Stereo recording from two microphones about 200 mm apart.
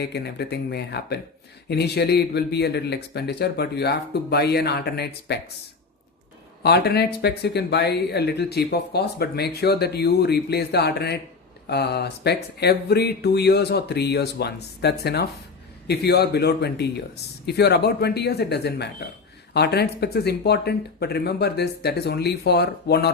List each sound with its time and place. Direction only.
0.0 s speech: 55° left (ahead or behind)
6.6 s speech: 55° left (ahead or behind)